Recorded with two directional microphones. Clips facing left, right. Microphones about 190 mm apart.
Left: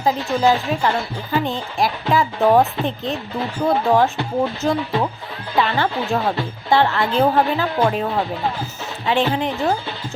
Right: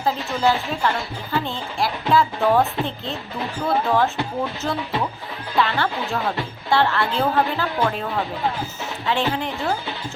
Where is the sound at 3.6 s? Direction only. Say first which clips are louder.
Left 4 dB; 15° left (ahead or behind).